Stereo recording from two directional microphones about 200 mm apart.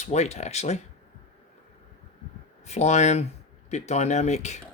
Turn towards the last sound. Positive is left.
turn(degrees=35)  # may be behind; listen again after turning